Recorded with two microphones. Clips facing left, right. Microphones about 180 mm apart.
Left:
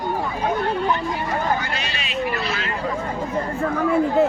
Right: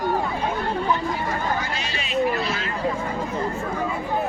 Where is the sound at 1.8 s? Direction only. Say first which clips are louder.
Left 1 dB; 70° left (ahead or behind).